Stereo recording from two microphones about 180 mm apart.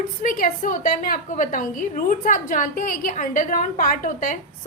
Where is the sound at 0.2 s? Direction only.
50° left (ahead or behind).